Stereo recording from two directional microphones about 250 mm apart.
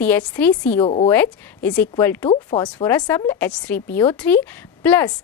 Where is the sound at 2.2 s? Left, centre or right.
Centre.